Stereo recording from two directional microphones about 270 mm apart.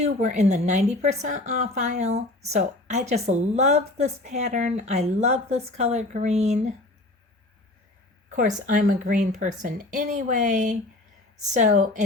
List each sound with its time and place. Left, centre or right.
0.0 s a woman's voice: right
8.4 s a woman's voice: right